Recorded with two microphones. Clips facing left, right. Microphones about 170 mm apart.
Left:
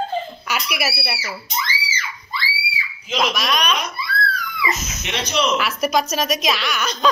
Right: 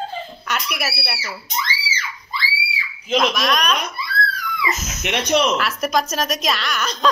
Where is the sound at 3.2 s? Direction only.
Centre (ahead or behind).